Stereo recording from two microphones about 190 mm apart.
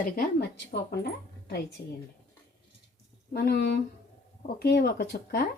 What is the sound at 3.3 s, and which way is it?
A woman's voice, 60° left (ahead or behind).